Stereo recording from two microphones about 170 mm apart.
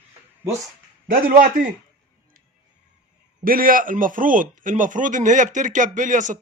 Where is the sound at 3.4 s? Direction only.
55° right (ahead or behind).